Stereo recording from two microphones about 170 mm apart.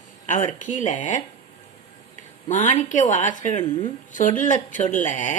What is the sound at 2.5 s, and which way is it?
Speech, 45° left (ahead or behind).